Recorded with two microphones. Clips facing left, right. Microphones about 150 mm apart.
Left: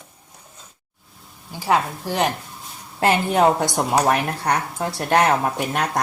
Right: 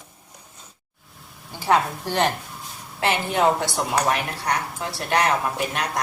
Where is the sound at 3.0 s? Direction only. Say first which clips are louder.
Left 4 dB; 40° left (ahead or behind).